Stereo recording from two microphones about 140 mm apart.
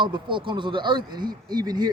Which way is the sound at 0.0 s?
35° right (ahead or behind).